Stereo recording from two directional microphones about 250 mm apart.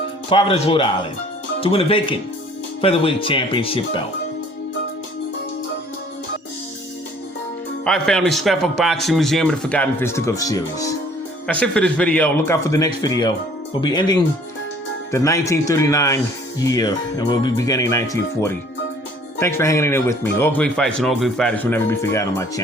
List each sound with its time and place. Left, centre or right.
0.3 s speech: left
7.9 s speech: centre